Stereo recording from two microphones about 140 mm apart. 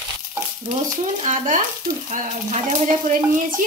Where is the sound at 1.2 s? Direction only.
60° right (ahead or behind).